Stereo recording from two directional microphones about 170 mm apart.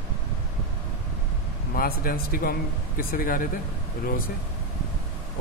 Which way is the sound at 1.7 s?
60° left (ahead or behind).